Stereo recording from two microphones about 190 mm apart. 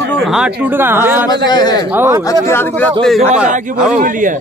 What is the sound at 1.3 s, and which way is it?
Speech, 20° left (ahead or behind).